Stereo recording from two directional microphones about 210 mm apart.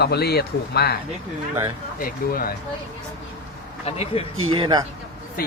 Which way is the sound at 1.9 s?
45° left (ahead or behind).